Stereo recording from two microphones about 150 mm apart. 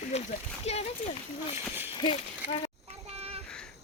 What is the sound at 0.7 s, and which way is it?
Speech, 45° left (ahead or behind).